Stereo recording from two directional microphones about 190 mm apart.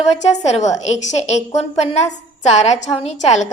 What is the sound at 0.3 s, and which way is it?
A woman's voice, 35° left (ahead or behind).